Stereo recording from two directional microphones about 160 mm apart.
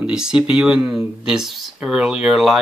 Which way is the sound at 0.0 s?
5° right (ahead or behind).